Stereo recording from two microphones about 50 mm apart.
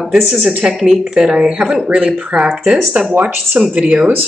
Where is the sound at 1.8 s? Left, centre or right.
Right.